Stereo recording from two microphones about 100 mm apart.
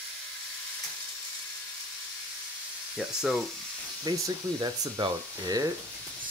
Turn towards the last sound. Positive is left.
turn(degrees=-40)  # may be behind; listen again after turning